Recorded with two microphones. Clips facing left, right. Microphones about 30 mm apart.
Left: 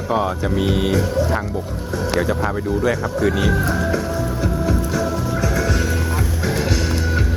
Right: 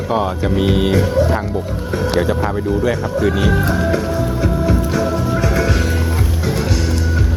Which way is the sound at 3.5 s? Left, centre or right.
Right.